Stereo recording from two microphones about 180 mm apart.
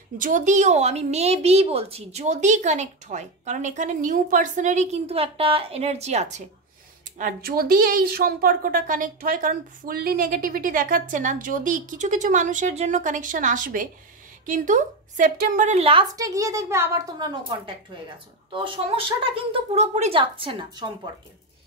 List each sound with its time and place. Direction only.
0.2 s a woman's voice: 45° right (ahead or behind)
7.2 s a woman's voice: 50° right (ahead or behind); by 21.1 s 25° right (ahead or behind)